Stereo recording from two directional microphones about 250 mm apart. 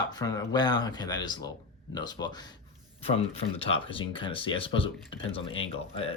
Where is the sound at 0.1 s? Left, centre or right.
Centre.